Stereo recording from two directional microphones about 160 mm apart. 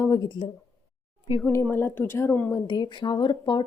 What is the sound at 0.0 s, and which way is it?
Speech, 25° left (ahead or behind).